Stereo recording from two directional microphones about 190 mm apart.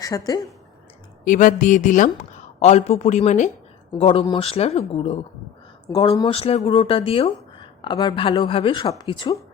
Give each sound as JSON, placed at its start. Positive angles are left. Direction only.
{"t": 0.0, "sound": "speech", "side_deg": 20}
{"t": 1.2, "sound": "speech", "side_deg": 45}